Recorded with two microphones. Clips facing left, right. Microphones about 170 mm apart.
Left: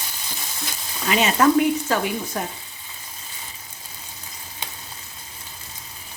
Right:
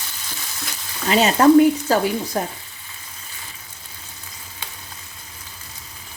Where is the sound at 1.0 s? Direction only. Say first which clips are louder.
Right 4 dB; 35° right (ahead or behind).